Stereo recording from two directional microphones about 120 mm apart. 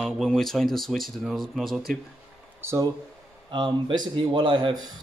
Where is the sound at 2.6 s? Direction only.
20° right (ahead or behind).